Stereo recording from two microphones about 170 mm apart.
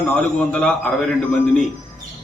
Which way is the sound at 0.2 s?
5° left (ahead or behind).